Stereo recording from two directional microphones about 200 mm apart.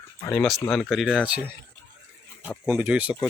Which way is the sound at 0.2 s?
10° left (ahead or behind).